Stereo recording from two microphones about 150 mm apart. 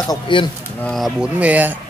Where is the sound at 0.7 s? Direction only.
5° left (ahead or behind).